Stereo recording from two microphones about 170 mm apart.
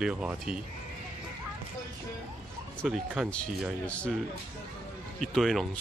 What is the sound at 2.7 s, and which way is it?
Speech, 5° right (ahead or behind).